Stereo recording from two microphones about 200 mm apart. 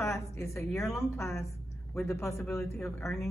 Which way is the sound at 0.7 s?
15° left (ahead or behind).